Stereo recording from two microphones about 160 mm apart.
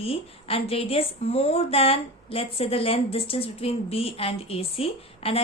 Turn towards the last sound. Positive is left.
turn(degrees=35)  # may be behind; listen again after turning